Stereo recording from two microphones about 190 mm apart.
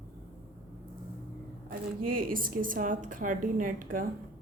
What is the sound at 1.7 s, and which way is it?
Speech, 50° right (ahead or behind).